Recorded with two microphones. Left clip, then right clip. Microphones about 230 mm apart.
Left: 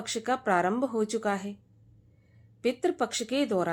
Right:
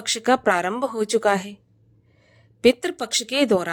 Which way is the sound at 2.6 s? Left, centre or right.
Right.